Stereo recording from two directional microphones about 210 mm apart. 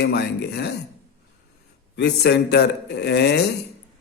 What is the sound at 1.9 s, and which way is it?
A man's voice, 55° left (ahead or behind).